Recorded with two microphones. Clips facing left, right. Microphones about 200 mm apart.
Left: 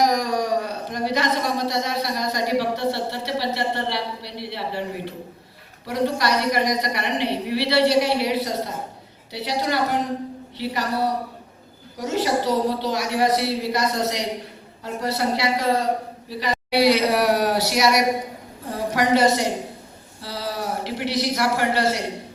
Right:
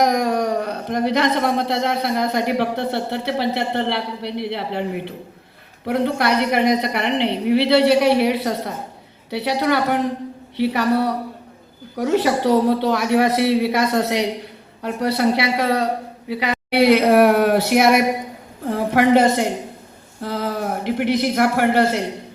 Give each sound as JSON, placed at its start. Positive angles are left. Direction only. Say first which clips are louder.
{"t": 0.0, "sound": "speech", "louder": "right 3 dB", "side_deg": -55}
{"t": 5.8, "sound": "a man's voice", "louder": "right 3 dB", "side_deg": -55}